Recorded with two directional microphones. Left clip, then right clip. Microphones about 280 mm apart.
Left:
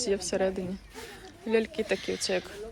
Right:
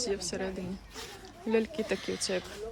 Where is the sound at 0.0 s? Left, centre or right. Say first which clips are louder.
Left 6 dB; centre.